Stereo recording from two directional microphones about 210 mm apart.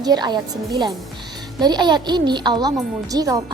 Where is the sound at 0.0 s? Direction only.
20° right (ahead or behind).